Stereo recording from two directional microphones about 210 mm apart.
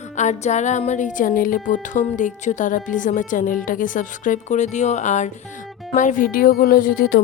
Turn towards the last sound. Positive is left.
turn(degrees=45)  # may be behind; listen again after turning